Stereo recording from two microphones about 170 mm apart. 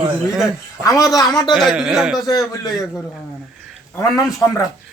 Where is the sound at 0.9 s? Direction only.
20° left (ahead or behind).